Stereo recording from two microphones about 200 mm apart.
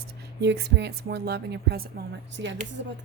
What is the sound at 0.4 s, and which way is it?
Speech, 55° right (ahead or behind).